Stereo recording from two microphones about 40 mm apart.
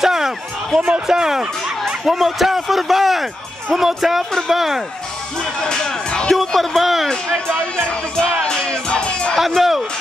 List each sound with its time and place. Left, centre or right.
0.0 s a sound: centre
0.7 s speech: right
1.0 s speech: centre
2.0 s a man's voice: centre
5.4 s speech: centre
6.8 s a man's voice: centre
7.1 s speech: centre
7.9 s music: left
9.6 s a sound: centre